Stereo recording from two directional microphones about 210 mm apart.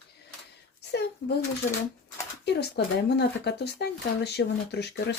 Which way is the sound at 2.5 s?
50° left (ahead or behind).